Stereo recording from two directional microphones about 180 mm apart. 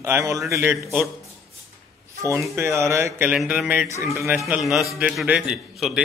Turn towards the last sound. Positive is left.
turn(degrees=-5)  # may be behind; listen again after turning